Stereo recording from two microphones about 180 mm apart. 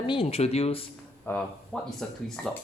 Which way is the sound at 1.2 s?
5° left (ahead or behind).